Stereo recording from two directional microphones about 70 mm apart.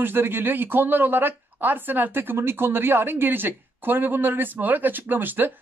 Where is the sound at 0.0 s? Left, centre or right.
Right.